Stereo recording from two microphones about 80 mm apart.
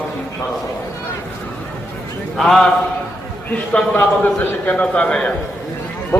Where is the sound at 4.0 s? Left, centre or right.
Centre.